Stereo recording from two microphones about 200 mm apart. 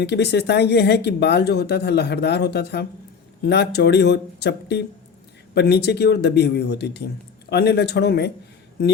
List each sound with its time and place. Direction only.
0.0 s speech: 55° left (ahead or behind)